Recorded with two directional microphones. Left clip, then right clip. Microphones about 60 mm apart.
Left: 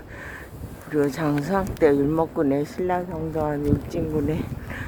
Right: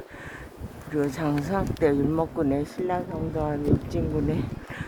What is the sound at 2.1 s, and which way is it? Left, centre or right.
Speech, centre.